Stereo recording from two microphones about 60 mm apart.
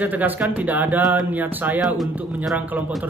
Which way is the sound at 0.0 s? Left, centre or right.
Right.